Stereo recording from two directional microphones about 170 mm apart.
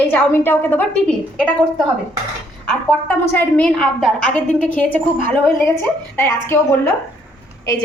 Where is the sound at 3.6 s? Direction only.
5° left (ahead or behind).